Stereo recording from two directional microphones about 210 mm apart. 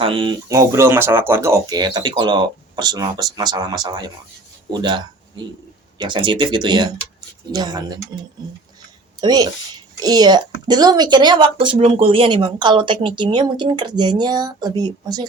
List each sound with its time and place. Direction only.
0.0 s a woman's voice: 25° right (ahead or behind)
9.2 s a woman's voice: 20° right (ahead or behind)